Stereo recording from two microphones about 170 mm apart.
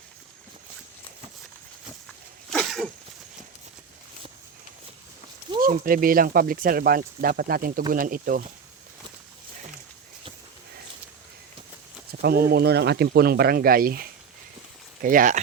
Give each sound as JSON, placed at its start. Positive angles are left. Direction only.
{"t": 2.5, "sound": "a sound", "side_deg": 0}
{"t": 5.5, "sound": "speech", "side_deg": -55}
{"t": 12.2, "sound": "speech", "side_deg": -65}